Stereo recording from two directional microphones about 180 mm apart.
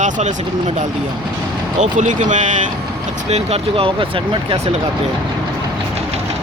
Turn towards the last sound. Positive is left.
turn(degrees=-30)  # may be behind; listen again after turning